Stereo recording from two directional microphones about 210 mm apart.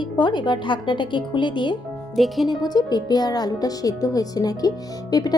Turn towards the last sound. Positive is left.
turn(degrees=20)  # may be behind; listen again after turning